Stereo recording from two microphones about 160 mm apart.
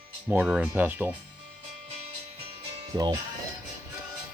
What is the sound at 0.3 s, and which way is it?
Speech, 5° right (ahead or behind).